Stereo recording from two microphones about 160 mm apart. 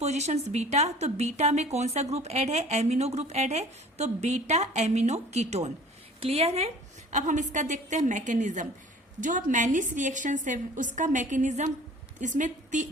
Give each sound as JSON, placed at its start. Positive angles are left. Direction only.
{"t": 0.0, "sound": "speech", "side_deg": -45}